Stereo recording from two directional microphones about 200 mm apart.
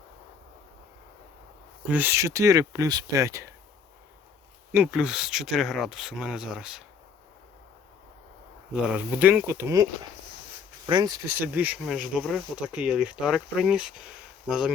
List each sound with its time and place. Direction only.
1.9 s speech: 10° right (ahead or behind)
4.7 s speech: 5° right (ahead or behind)
8.7 s speech: 5° right (ahead or behind)